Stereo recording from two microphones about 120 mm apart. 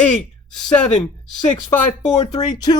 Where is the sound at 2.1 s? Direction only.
35° left (ahead or behind).